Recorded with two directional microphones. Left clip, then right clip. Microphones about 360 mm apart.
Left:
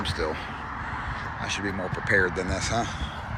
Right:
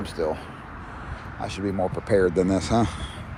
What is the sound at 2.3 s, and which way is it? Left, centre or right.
Speech, right.